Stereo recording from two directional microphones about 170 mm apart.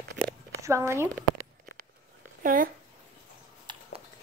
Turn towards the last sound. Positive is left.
turn(degrees=-25)  # may be behind; listen again after turning